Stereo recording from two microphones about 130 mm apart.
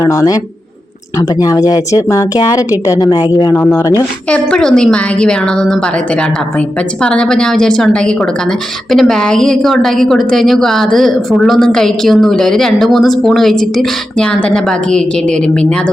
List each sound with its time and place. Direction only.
0.0 s speech: 25° left (ahead or behind)
1.4 s speech: 30° left (ahead or behind)
3.6 s speech: 20° left (ahead or behind)
4.3 s a woman's voice: 5° left (ahead or behind)
7.0 s a woman's voice: 5° left (ahead or behind)